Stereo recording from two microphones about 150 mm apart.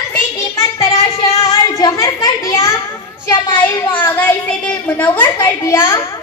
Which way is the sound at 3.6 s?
15° left (ahead or behind).